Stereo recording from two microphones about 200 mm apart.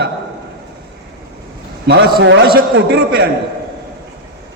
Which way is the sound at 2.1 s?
60° right (ahead or behind).